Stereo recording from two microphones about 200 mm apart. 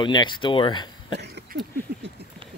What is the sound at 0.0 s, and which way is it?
Speech, 25° left (ahead or behind).